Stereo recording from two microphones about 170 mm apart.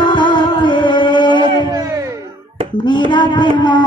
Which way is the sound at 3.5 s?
25° left (ahead or behind).